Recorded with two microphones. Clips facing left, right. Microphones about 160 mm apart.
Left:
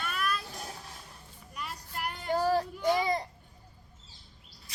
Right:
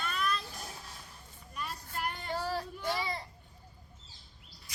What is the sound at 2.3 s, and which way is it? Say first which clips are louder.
Child singing: left 10 dB; 45° left (ahead or behind).